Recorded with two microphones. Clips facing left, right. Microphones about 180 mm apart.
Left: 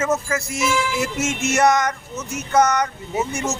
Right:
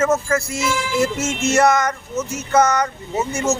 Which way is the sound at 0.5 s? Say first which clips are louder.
Right 1 dB; 20° left (ahead or behind).